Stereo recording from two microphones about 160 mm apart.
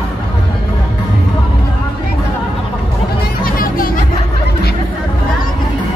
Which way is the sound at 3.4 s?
65° left (ahead or behind).